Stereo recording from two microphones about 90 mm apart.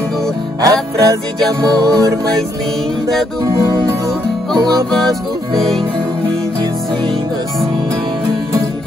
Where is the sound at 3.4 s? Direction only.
35° right (ahead or behind).